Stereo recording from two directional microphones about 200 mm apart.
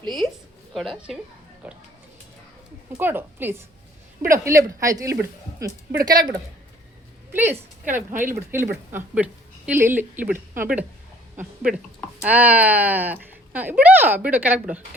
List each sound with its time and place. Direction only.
0.7 s a woman's voice: centre (ahead or behind)
3.0 s a woman's voice: 10° right (ahead or behind)